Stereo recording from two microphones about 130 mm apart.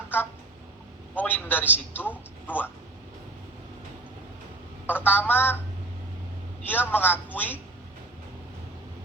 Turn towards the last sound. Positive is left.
turn(degrees=15)  # may be behind; listen again after turning